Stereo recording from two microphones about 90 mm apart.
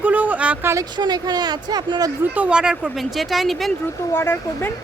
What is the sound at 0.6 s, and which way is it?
Speech, 30° right (ahead or behind).